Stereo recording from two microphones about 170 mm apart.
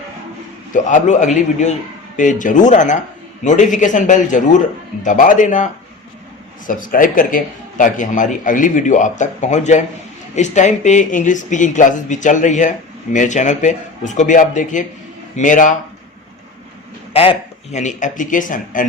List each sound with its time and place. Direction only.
0.7 s a man's voice: 45° left (ahead or behind)
17.2 s speech: 40° left (ahead or behind)